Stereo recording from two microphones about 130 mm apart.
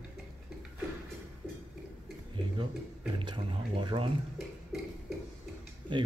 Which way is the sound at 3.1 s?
40° right (ahead or behind).